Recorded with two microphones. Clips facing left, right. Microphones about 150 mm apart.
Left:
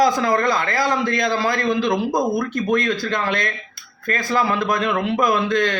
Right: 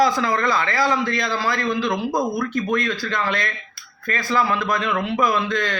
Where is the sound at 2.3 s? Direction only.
45° left (ahead or behind).